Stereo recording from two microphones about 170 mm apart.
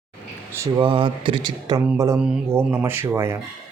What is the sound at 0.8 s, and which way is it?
A man's voice, 30° right (ahead or behind).